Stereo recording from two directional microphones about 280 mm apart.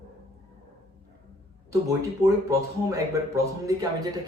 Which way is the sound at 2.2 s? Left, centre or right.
Centre.